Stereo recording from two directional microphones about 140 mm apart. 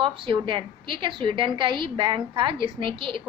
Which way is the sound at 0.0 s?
35° right (ahead or behind).